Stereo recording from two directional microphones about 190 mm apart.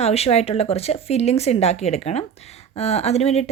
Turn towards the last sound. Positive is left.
turn(degrees=35)  # may be behind; listen again after turning